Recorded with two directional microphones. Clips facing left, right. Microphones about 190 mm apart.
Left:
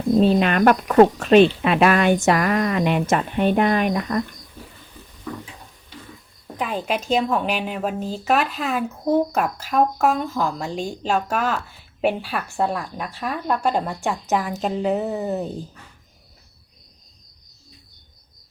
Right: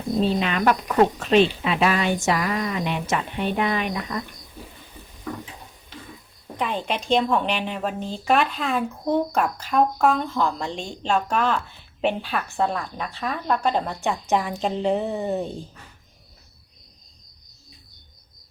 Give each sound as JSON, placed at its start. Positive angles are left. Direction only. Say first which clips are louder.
{"t": 0.3, "sound": "speech", "louder": "left 5 dB", "side_deg": 55}
{"t": 6.6, "sound": "a woman's voice", "louder": "left 2 dB", "side_deg": 5}